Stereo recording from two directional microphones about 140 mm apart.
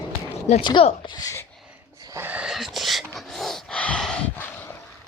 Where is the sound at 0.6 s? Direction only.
35° left (ahead or behind).